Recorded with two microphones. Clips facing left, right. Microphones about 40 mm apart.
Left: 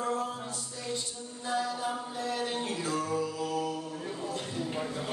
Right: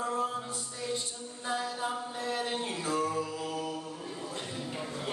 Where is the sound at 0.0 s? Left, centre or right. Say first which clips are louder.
Even; right.